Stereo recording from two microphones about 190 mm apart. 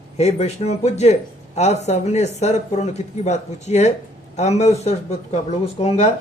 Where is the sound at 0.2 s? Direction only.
35° left (ahead or behind).